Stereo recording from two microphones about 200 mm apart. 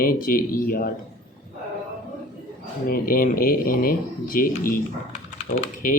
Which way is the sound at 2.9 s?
45° left (ahead or behind).